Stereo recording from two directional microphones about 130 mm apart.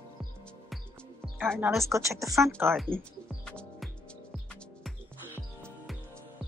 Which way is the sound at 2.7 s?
Centre (ahead or behind).